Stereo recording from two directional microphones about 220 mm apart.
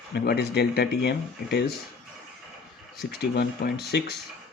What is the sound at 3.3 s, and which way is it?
Speech, 45° left (ahead or behind).